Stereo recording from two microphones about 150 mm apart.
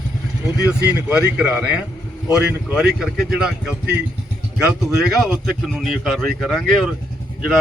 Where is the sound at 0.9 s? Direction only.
10° right (ahead or behind).